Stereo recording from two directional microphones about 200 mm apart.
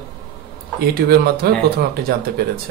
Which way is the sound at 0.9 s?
50° right (ahead or behind).